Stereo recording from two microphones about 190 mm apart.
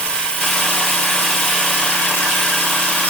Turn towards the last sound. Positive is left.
turn(degrees=5)  # may be behind; listen again after turning